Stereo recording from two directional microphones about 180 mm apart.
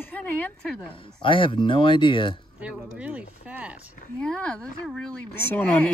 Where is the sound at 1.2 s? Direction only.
30° left (ahead or behind).